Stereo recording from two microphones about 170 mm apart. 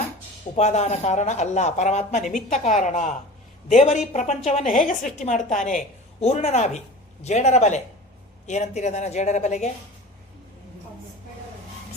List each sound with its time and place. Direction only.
0.5 s a woman's voice: 40° left (ahead or behind)